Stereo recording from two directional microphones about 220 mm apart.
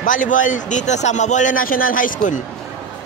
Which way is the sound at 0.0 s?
35° left (ahead or behind).